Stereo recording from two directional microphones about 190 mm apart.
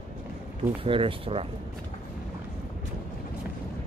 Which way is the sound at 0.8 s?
25° right (ahead or behind).